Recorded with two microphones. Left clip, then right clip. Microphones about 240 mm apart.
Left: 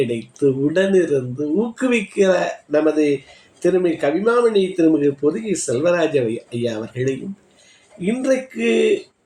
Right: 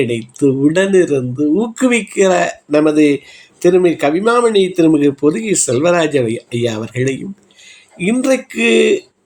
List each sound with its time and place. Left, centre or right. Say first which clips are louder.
0.0 s speech: right 4 dB; right